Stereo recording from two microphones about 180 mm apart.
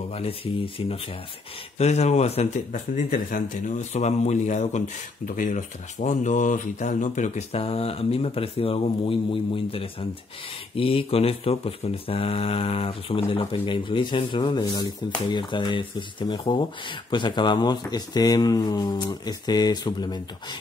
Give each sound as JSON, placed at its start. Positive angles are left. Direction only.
{"t": 0.1, "sound": "speech", "side_deg": 30}